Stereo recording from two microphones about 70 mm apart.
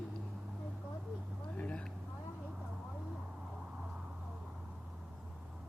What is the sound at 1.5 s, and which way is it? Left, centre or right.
Vehicle, centre.